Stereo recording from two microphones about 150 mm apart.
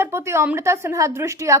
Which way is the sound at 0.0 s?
15° right (ahead or behind).